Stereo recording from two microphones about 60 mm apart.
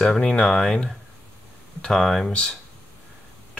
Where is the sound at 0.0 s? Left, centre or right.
Centre.